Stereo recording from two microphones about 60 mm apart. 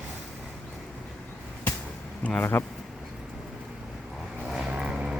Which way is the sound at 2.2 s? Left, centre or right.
Left.